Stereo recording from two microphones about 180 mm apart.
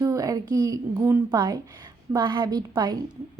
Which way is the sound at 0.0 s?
20° right (ahead or behind).